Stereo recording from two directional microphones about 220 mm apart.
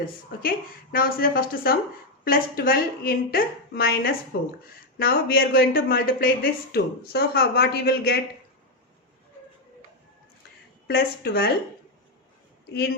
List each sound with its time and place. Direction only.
0.0 s speech: 40° left (ahead or behind)
10.8 s speech: 45° left (ahead or behind)